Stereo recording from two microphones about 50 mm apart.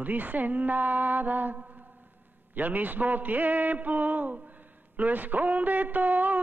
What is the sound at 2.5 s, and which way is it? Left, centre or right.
Speech, right.